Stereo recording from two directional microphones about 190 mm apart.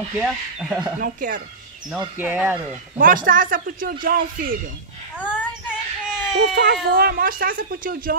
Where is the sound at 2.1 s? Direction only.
5° right (ahead or behind).